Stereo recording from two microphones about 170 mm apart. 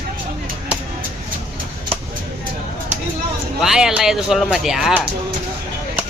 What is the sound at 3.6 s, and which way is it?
Speech, 5° right (ahead or behind).